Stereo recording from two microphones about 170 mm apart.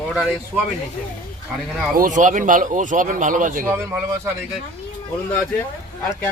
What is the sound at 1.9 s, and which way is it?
Speech, 50° right (ahead or behind).